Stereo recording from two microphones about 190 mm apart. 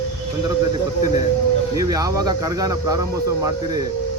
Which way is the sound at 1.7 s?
20° right (ahead or behind).